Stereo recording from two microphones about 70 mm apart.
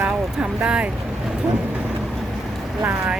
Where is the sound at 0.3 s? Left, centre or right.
Centre.